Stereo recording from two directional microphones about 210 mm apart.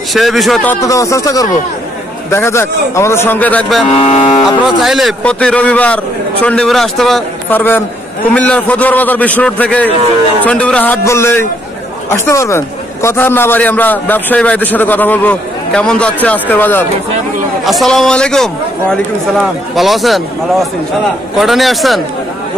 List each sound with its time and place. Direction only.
0.1 s a man's voice: centre (ahead or behind)
0.7 s a man's voice: 15° left (ahead or behind)
4.0 s cattle: 25° left (ahead or behind)
4.7 s a man's voice: centre (ahead or behind)